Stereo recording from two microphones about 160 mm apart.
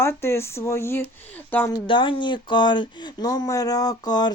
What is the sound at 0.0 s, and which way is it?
Speech, 15° left (ahead or behind).